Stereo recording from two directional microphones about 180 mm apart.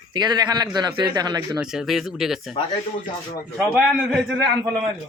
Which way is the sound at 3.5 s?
5° right (ahead or behind).